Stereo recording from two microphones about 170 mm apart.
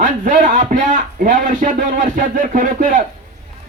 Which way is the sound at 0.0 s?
50° right (ahead or behind).